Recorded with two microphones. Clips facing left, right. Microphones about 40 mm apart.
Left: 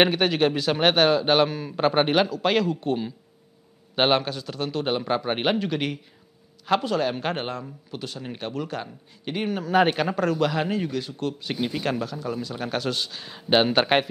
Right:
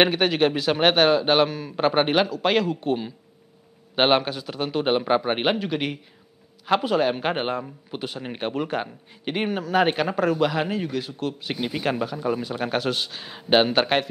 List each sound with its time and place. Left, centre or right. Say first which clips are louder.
0.0 s a man's voice: right 1 dB; centre; by 9.5 s right
9.5 s a man's voice: left 1 dB; centre